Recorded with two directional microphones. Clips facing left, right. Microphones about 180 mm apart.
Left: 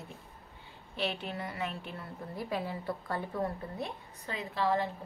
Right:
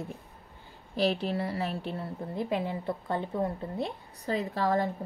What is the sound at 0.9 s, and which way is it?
A woman's voice, 35° right (ahead or behind).